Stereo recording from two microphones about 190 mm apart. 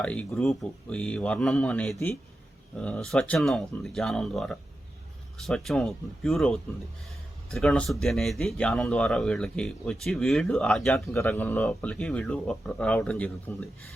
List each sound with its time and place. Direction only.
0.0 s speech: 5° left (ahead or behind)